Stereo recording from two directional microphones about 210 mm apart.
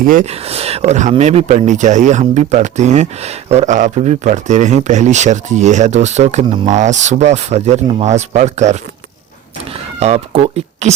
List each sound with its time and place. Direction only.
0.0 s speech: 40° right (ahead or behind)
10.0 s speech: 30° right (ahead or behind)